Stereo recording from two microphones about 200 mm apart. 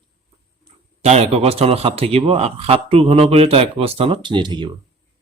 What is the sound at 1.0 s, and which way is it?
Speech, 30° right (ahead or behind).